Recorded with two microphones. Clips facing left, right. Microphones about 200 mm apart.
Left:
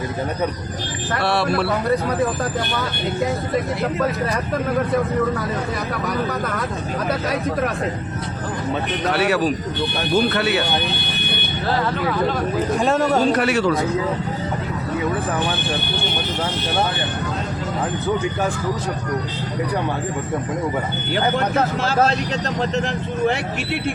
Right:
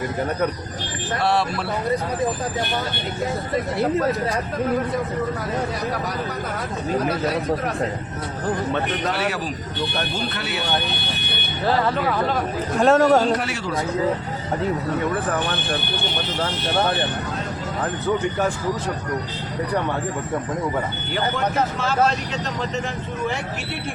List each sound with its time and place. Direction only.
1.2 s speech: 70° left (ahead or behind)
9.1 s speech: 70° left (ahead or behind)
12.8 s a man's voice: centre (ahead or behind)
13.3 s speech: 70° left (ahead or behind)